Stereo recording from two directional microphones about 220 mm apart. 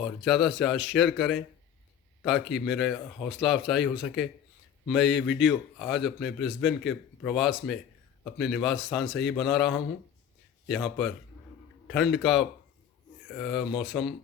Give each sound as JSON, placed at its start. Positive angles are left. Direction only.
{"t": 0.3, "sound": "speech", "side_deg": 0}
{"t": 5.1, "sound": "speech", "side_deg": 55}
{"t": 5.8, "sound": "speech", "side_deg": 0}